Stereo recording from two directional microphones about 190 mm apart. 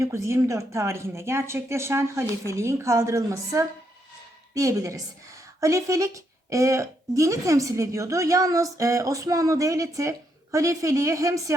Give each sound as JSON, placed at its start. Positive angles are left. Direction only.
{"t": 0.0, "sound": "a woman's voice", "side_deg": -15}